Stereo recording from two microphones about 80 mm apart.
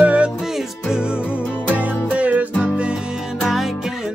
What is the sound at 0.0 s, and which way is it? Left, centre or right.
Music, centre.